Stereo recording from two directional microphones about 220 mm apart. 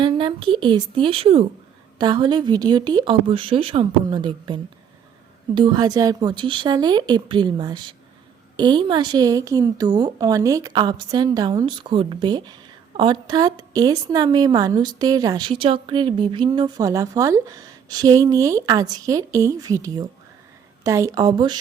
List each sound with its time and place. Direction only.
0.0 s a woman's voice: 20° right (ahead or behind)